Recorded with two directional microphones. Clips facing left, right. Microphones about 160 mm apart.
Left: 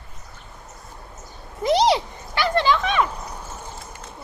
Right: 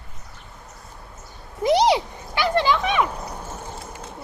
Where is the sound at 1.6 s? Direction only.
15° right (ahead or behind).